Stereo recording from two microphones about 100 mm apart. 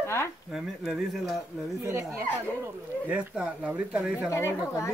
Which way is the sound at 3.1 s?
10° right (ahead or behind).